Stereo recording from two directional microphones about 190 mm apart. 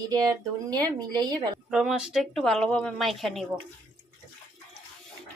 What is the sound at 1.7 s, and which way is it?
Speech, 5° right (ahead or behind).